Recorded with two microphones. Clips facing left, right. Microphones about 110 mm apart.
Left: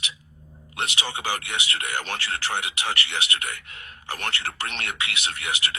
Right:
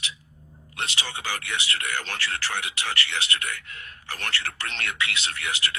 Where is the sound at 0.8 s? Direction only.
20° left (ahead or behind).